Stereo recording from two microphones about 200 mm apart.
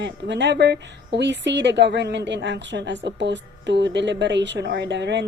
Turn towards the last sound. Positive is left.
turn(degrees=-60)  # may be behind; listen again after turning